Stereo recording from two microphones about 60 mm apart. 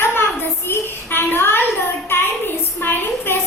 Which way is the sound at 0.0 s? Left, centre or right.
Left.